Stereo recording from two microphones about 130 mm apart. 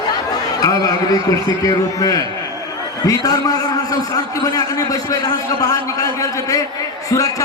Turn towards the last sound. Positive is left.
turn(degrees=25)  # may be behind; listen again after turning